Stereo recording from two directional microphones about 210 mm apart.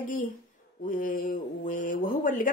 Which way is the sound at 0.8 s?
40° left (ahead or behind).